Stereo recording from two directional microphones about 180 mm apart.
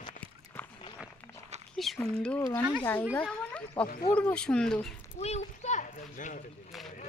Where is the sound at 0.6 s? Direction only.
10° left (ahead or behind).